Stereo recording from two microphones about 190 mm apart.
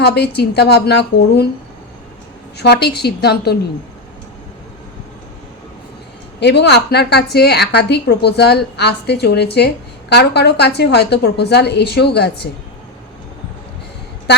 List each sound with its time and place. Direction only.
0.0 s a woman's voice: 60° left (ahead or behind)
2.6 s a woman's voice: 60° left (ahead or behind)
6.4 s a woman's voice: 60° left (ahead or behind)